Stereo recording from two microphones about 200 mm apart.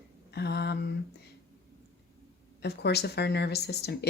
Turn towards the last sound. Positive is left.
turn(degrees=55)  # may be behind; listen again after turning